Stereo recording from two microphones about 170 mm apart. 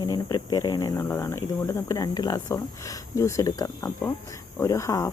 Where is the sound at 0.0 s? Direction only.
20° left (ahead or behind).